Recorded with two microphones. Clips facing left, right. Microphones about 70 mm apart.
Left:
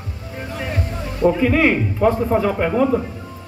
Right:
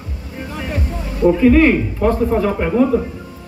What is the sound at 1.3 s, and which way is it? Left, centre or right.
Speech, centre.